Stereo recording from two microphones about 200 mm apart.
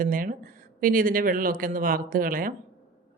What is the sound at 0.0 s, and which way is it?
A woman's voice, 45° right (ahead or behind).